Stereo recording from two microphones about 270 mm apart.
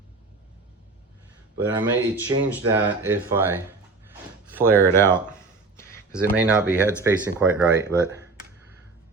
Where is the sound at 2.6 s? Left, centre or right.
Centre.